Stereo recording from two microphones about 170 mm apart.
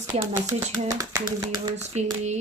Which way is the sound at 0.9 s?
20° right (ahead or behind).